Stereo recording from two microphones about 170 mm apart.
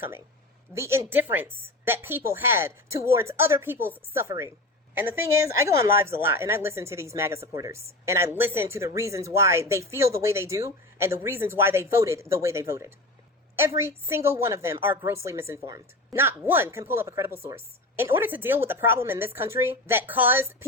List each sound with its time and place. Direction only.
0.7 s a woman's voice: 15° right (ahead or behind)